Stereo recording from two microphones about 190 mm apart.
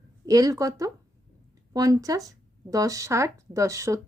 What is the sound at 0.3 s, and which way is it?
A woman's voice, 20° right (ahead or behind).